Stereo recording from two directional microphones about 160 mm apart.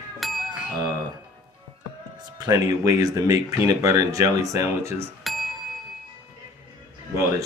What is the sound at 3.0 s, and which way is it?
Speech, 20° right (ahead or behind).